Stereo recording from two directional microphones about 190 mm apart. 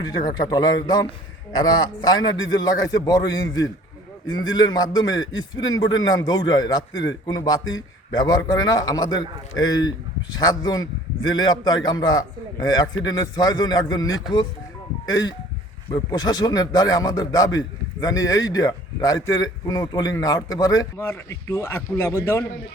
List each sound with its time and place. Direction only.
0.0 s a man's voice: 20° left (ahead or behind)